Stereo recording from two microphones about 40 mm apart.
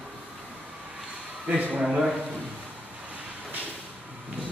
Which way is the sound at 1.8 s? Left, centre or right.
Centre.